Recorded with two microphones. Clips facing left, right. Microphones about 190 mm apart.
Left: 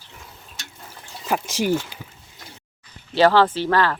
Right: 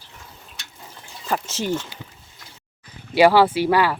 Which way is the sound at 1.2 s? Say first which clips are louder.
Left 3 dB; 10° left (ahead or behind).